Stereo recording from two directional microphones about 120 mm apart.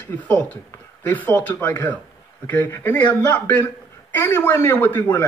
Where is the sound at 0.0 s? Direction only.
15° left (ahead or behind).